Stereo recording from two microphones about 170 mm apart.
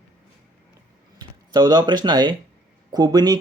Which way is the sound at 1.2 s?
25° right (ahead or behind).